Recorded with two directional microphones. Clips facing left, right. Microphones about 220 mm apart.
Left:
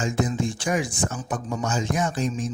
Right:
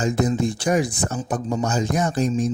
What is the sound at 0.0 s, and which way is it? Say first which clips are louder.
Speech: right 4 dB; 40° right (ahead or behind).